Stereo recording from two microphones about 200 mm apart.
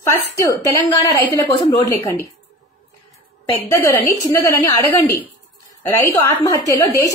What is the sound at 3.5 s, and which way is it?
A woman's voice, 10° left (ahead or behind).